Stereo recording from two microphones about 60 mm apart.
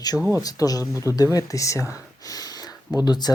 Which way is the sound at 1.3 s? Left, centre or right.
Left.